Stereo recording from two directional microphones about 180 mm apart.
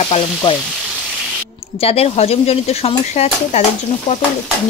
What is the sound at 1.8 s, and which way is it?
Speech, 35° left (ahead or behind).